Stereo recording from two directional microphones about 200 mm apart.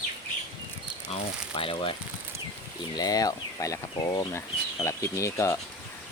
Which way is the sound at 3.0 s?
20° left (ahead or behind).